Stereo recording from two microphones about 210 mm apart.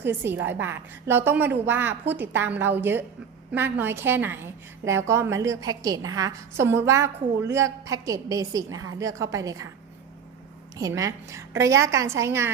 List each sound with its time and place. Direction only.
0.0 s a woman's voice: 10° right (ahead or behind)
10.8 s a woman's voice: 15° right (ahead or behind)